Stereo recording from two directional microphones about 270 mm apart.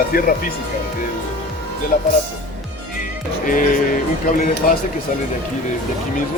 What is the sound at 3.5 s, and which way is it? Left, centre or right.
Speech, left.